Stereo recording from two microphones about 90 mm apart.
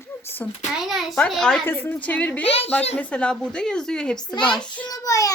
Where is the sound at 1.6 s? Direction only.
20° left (ahead or behind).